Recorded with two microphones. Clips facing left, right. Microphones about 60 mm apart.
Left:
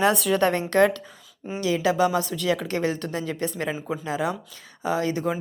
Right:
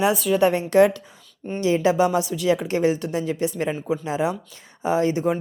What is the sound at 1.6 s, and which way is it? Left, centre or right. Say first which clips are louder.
Speech: right 3 dB; right.